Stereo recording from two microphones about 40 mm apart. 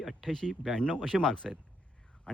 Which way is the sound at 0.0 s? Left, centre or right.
Centre.